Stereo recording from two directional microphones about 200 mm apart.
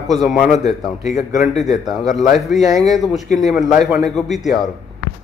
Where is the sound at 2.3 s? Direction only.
Centre (ahead or behind).